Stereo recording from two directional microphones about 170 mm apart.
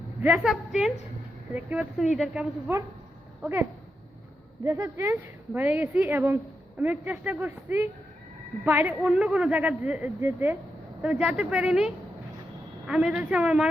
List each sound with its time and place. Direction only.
0.2 s a woman's voice: 5° right (ahead or behind)
9.0 s a woman's voice: 5° right (ahead or behind)
12.9 s a woman's voice: 5° right (ahead or behind)